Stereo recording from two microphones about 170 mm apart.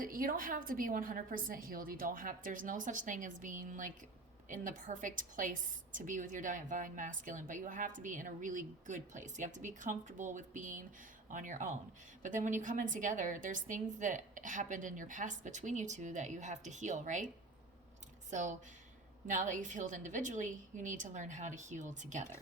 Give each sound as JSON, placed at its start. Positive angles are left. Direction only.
{"t": 0.0, "sound": "a woman's voice", "side_deg": -55}
{"t": 18.3, "sound": "a woman's voice", "side_deg": -45}